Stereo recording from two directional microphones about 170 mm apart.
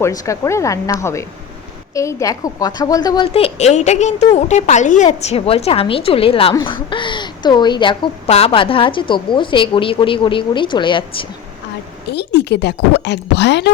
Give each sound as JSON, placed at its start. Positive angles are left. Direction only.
{"t": 0.0, "sound": "a woman's voice", "side_deg": 15}
{"t": 12.1, "sound": "speech", "side_deg": 90}